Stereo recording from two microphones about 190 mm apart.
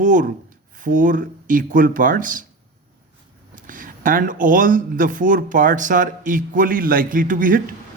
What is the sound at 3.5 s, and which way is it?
Speech, 45° right (ahead or behind).